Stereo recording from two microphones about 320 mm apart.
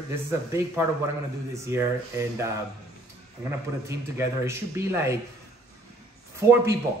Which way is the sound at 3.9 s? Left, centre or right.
Centre.